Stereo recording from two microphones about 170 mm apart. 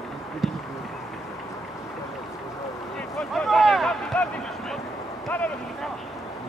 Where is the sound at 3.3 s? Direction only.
Centre (ahead or behind).